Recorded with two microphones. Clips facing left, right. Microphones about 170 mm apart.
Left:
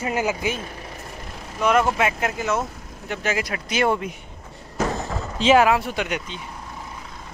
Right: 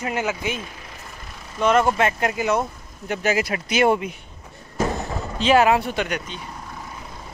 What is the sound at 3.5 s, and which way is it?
Speech, 15° right (ahead or behind).